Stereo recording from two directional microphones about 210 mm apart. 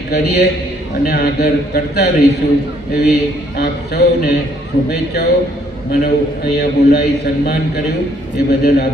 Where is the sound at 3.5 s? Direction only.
50° left (ahead or behind).